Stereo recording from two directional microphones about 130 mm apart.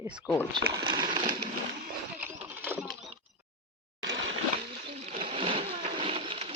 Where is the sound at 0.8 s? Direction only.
35° right (ahead or behind).